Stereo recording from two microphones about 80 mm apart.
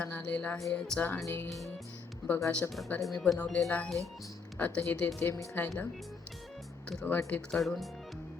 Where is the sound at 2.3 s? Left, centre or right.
Left.